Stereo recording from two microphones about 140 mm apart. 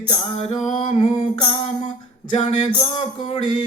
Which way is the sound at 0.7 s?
35° left (ahead or behind).